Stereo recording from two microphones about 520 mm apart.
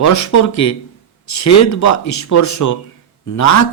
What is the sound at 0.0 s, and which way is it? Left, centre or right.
Speech, left.